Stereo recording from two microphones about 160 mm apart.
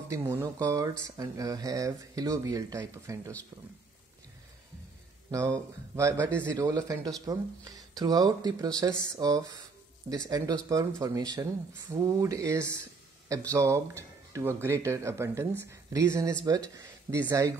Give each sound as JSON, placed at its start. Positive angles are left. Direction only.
{"t": 0.1, "sound": "speech", "side_deg": -15}
{"t": 5.3, "sound": "speech", "side_deg": -20}